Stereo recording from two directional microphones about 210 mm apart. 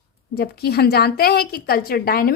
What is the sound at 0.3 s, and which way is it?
A woman's voice, 50° left (ahead or behind).